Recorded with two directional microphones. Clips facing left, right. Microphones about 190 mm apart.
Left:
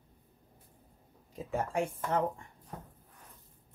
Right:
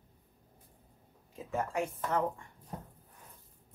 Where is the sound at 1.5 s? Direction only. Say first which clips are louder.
Left 1 dB; 30° left (ahead or behind).